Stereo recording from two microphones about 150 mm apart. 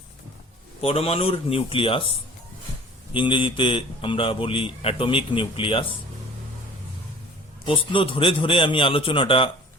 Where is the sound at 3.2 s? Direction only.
35° left (ahead or behind).